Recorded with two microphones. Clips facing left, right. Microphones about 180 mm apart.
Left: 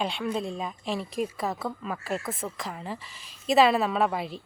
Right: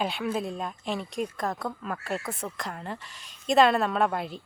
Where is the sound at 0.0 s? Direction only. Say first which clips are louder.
Even; 5° right (ahead or behind).